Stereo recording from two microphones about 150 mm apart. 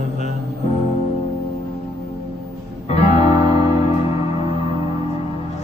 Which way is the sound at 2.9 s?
40° left (ahead or behind).